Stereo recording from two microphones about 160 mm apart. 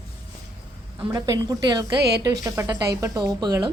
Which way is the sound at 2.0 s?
90° right.